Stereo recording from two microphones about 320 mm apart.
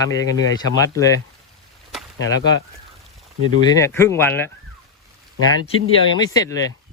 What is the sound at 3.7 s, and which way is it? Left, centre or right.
Speech, centre.